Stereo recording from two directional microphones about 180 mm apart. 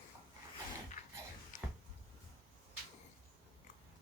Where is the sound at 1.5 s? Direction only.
45° left (ahead or behind).